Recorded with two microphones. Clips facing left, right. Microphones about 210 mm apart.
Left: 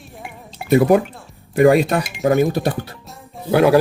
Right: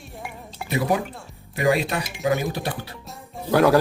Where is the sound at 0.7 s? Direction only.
50° left (ahead or behind).